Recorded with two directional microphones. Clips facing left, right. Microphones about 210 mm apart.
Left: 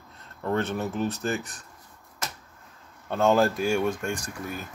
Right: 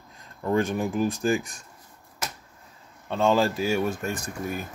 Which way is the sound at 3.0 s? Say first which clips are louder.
Left 1 dB; centre (ahead or behind).